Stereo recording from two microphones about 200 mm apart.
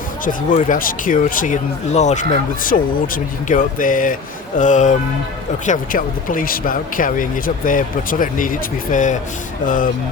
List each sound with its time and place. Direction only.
0.3 s speech: 40° left (ahead or behind)